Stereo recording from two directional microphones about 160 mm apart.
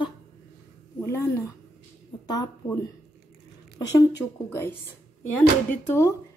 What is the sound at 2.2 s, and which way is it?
Speech, 25° left (ahead or behind).